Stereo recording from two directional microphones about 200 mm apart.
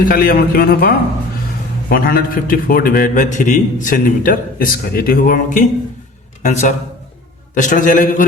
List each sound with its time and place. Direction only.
0.0 s a man's voice: 45° left (ahead or behind)